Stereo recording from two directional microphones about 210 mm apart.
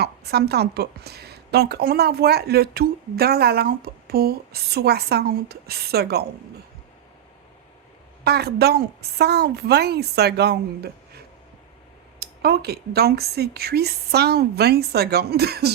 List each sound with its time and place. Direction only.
0.0 s a woman's voice: 50° right (ahead or behind)
8.2 s a woman's voice: 50° right (ahead or behind)
12.2 s a woman's voice: 50° right (ahead or behind)